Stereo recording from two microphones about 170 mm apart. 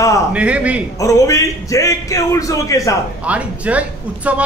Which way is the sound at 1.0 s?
20° left (ahead or behind).